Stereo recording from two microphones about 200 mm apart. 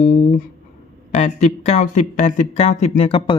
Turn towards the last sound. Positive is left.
turn(degrees=25)  # may be behind; listen again after turning